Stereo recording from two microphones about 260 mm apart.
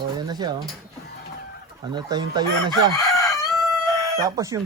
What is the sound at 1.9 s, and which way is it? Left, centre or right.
Speech, centre.